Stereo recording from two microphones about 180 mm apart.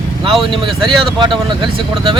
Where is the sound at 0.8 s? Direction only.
25° right (ahead or behind).